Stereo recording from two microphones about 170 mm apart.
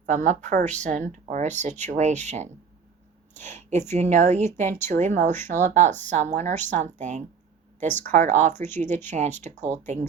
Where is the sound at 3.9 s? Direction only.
45° right (ahead or behind).